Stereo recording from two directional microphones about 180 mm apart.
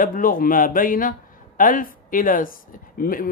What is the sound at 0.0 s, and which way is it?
Speech, 50° left (ahead or behind).